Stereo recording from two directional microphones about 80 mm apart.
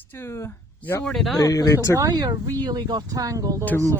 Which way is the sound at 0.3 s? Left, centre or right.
Left.